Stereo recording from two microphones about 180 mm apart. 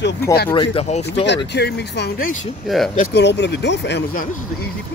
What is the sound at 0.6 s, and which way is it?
Speech, 35° left (ahead or behind).